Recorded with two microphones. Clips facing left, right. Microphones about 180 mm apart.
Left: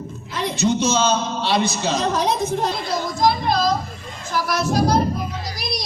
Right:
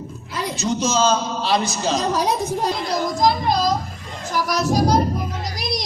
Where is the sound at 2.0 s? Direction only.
10° right (ahead or behind).